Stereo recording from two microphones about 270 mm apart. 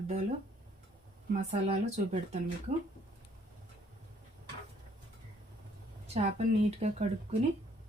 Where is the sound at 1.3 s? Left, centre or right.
Right.